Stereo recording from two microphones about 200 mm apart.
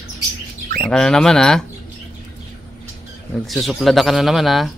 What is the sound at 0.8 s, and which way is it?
Speech, 5° left (ahead or behind).